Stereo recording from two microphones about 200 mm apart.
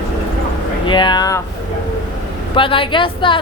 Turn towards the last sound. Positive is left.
turn(degrees=25)  # may be behind; listen again after turning